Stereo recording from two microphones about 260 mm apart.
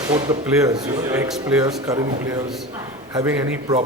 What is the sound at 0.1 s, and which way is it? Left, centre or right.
A man's voice, centre.